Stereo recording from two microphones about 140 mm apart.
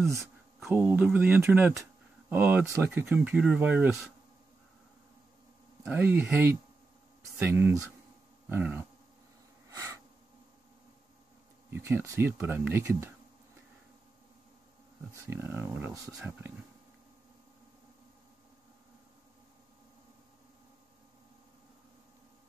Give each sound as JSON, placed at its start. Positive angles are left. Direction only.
{"t": 0.7, "sound": "speech", "side_deg": -15}
{"t": 5.9, "sound": "speech", "side_deg": -15}
{"t": 11.7, "sound": "speech", "side_deg": -20}
{"t": 15.2, "sound": "speech", "side_deg": -15}